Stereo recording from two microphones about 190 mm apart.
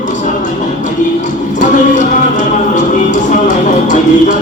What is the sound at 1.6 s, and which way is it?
Music, 40° left (ahead or behind).